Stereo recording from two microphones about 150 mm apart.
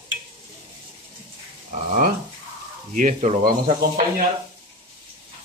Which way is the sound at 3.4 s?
70° right (ahead or behind).